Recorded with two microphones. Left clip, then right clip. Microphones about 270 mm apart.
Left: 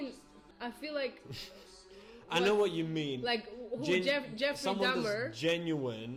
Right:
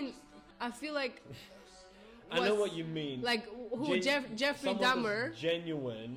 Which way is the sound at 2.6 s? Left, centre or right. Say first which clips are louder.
Left 3 dB; right.